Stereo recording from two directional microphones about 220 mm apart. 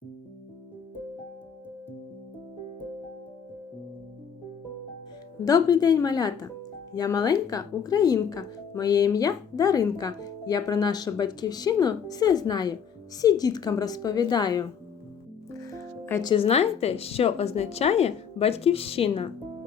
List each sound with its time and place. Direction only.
5.5 s speech: 15° left (ahead or behind)
15.7 s music: 10° left (ahead or behind)
16.3 s a woman's voice: 25° left (ahead or behind)